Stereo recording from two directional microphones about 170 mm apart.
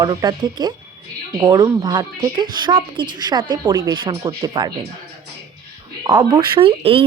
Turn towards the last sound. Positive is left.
turn(degrees=-35)  # may be behind; listen again after turning